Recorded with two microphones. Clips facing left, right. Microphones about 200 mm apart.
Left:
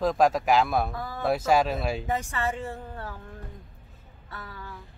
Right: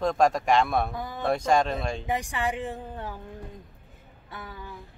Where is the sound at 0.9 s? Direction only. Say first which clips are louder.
Right 1 dB; 20° right (ahead or behind).